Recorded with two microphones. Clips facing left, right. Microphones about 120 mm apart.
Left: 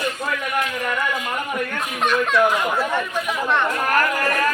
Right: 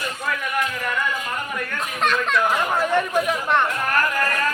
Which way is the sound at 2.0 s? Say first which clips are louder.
Left 2 dB; 5° left (ahead or behind).